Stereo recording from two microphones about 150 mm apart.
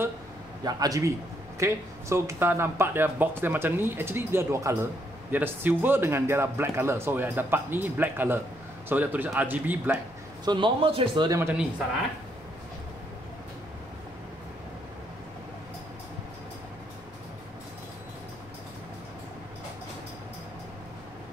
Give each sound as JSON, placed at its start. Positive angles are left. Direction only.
{"t": 0.7, "sound": "a man's voice", "side_deg": -25}
{"t": 10.4, "sound": "a man's voice", "side_deg": -30}
{"t": 11.2, "sound": "speech", "side_deg": -15}